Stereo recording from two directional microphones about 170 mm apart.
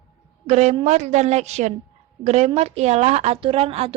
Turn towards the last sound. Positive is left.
turn(degrees=-35)  # may be behind; listen again after turning